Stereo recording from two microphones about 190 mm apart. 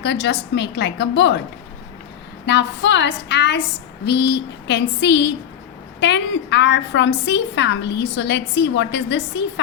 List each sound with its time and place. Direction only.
0.0 s a woman's voice: 65° left (ahead or behind)
2.5 s a woman's voice: 65° left (ahead or behind)